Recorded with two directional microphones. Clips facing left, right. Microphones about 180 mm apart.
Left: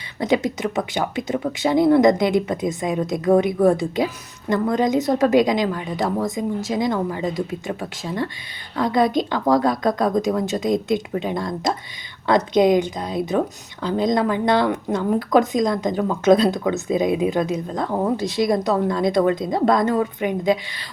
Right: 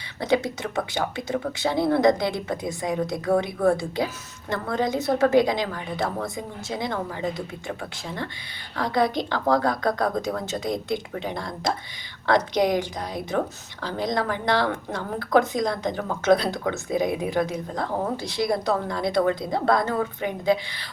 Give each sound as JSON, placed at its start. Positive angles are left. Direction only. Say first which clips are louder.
{"t": 0.2, "sound": "a woman's voice", "louder": "left 3 dB", "side_deg": 20}